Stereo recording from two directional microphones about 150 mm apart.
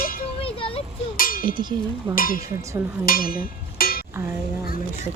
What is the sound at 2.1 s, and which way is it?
Speech, 70° left (ahead or behind).